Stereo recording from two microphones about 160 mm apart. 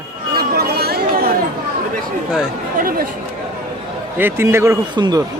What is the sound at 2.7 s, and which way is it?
Speech, 60° right (ahead or behind).